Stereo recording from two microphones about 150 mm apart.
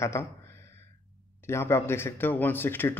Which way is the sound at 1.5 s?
15° left (ahead or behind).